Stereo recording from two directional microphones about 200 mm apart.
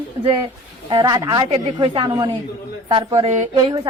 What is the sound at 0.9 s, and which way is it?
Speech, 20° right (ahead or behind).